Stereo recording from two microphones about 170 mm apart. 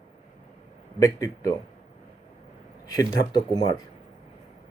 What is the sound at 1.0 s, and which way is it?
Speech, 20° left (ahead or behind).